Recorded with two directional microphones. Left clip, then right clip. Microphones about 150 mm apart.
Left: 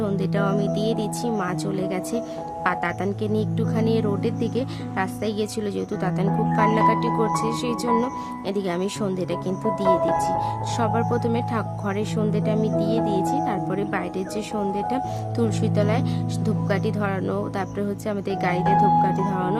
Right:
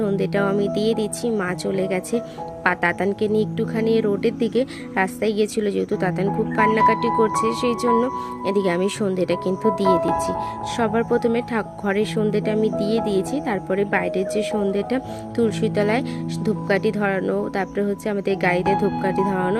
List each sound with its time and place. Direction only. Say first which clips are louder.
0.0 s speech: right 3 dB; 15° right (ahead or behind)